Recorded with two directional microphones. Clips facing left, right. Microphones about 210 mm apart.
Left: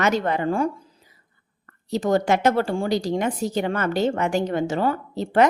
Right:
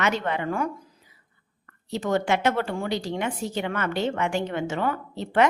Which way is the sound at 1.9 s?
35° left (ahead or behind).